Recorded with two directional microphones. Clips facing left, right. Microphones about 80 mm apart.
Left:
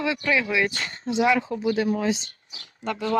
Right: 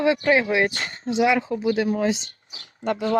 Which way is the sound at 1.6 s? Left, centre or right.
Right.